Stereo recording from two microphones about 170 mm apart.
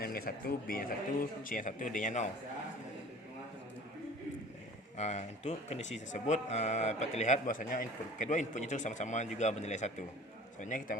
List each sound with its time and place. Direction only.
0.0 s speech: 60° left (ahead or behind)
4.9 s speech: 40° left (ahead or behind)